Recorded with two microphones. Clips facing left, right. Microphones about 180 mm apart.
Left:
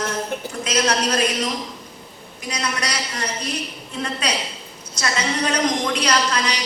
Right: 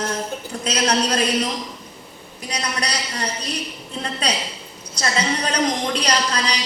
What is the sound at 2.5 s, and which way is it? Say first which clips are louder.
A woman's voice: even; 35° right (ahead or behind).